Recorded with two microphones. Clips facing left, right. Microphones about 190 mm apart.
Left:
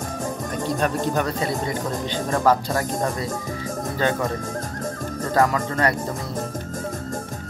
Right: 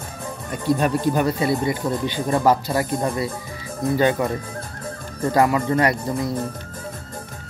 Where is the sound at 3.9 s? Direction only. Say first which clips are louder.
Right 4 dB; 15° right (ahead or behind).